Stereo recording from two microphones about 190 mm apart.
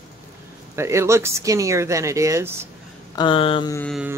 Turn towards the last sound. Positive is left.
turn(degrees=-5)  # may be behind; listen again after turning